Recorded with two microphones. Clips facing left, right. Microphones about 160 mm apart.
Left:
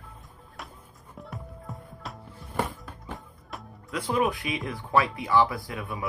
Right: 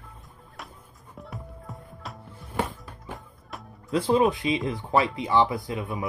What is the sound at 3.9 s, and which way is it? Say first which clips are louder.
Speech: right 5 dB; 25° right (ahead or behind).